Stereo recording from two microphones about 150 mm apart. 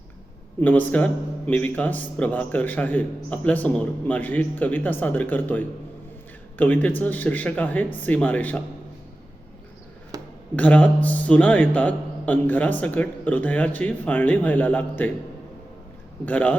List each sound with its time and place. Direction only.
0.6 s a man's voice: 10° left (ahead or behind)
10.1 s a sound: 25° right (ahead or behind)
10.5 s a man's voice: 10° left (ahead or behind)
16.2 s a man's voice: 10° left (ahead or behind)